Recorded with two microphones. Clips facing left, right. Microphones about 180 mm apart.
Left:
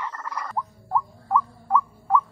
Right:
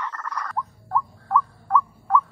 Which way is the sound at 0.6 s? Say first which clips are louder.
Even; 10° left (ahead or behind).